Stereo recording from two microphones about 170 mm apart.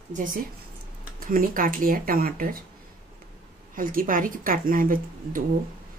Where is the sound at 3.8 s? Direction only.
55° right (ahead or behind).